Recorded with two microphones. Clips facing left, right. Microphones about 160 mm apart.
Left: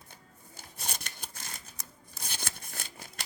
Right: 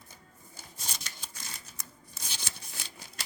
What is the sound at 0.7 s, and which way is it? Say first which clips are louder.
Scissors: left 3 dB; 55° left (ahead or behind).